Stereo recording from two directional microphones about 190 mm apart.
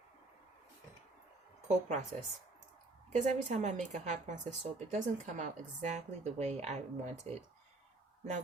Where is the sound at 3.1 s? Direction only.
40° right (ahead or behind).